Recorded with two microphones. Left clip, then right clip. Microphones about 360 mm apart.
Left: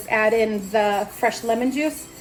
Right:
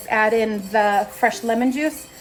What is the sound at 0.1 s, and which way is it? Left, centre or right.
A woman's voice, right.